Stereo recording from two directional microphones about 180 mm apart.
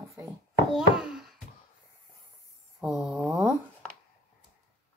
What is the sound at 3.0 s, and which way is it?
Speech, 5° right (ahead or behind).